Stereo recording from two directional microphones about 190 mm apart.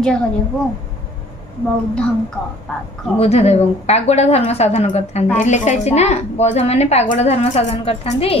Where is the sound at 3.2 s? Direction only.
35° left (ahead or behind).